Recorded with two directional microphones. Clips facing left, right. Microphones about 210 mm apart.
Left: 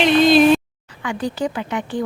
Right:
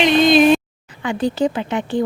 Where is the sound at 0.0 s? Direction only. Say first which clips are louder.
Even; 5° left (ahead or behind).